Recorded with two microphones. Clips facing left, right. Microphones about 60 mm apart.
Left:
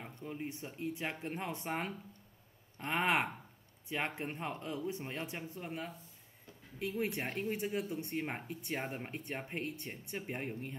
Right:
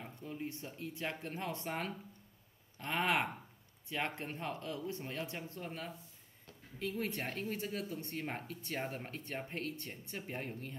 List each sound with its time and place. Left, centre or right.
0.0 s speech: centre
7.0 s speech: centre